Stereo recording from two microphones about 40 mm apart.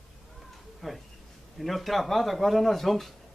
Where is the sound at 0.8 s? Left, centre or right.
Centre.